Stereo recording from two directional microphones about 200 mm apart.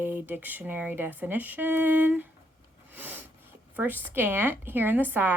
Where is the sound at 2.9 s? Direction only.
10° right (ahead or behind).